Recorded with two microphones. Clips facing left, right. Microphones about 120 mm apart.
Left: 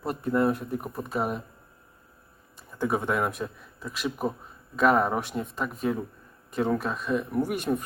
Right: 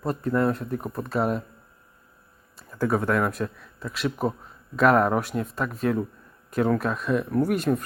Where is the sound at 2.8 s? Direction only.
5° left (ahead or behind).